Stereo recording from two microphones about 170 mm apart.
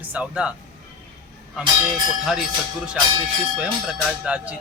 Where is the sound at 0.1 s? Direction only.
5° right (ahead or behind).